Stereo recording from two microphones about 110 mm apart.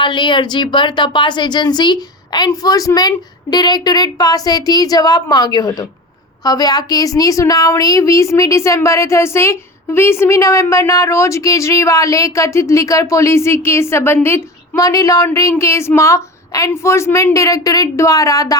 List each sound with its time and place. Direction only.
0.0 s a woman's voice: 45° left (ahead or behind)